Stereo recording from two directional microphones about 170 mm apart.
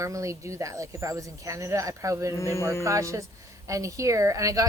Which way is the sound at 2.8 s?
20° right (ahead or behind).